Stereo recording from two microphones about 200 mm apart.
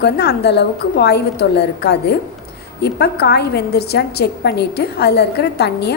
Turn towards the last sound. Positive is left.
turn(degrees=55)  # may be behind; listen again after turning